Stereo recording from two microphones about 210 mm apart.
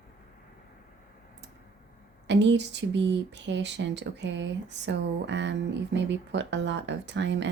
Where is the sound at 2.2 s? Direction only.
55° right (ahead or behind).